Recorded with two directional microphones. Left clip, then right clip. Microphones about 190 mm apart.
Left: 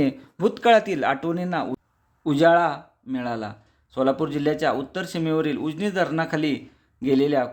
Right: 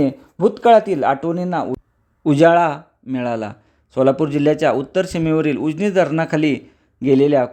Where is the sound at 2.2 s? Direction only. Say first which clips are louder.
Right 5 dB; 30° right (ahead or behind).